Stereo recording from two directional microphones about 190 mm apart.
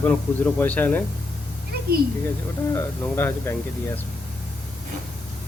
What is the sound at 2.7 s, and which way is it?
Speech, 10° left (ahead or behind).